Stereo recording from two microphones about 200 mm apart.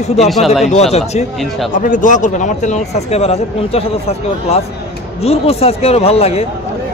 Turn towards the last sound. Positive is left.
turn(degrees=30)  # may be behind; listen again after turning